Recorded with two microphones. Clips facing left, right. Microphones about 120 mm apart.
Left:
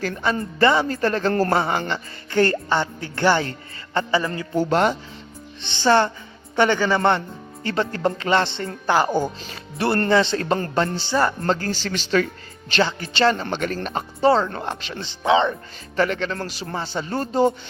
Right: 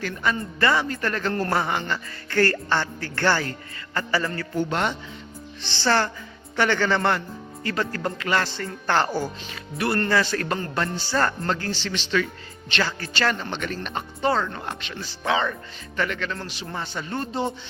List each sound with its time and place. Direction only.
0.0 s speech: 30° left (ahead or behind)
4.5 s speech: 35° left (ahead or behind)
5.6 s speech: 20° left (ahead or behind)
7.6 s speech: 25° left (ahead or behind)
8.9 s speech: 10° left (ahead or behind)
9.5 s speech: 30° left (ahead or behind)
11.1 s speech: 10° left (ahead or behind)
11.4 s speech: 40° left (ahead or behind)
12.8 s speech: 25° left (ahead or behind)
13.4 s speech: 45° left (ahead or behind); by 15.5 s 20° left (ahead or behind)
16.0 s speech: 35° left (ahead or behind)